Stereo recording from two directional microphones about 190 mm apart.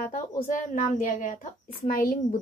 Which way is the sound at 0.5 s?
45° left (ahead or behind).